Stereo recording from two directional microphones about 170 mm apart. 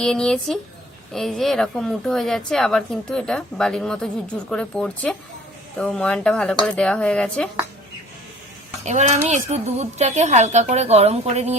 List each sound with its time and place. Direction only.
0.0 s a woman's voice: 5° left (ahead or behind)
8.8 s a woman's voice: 45° right (ahead or behind)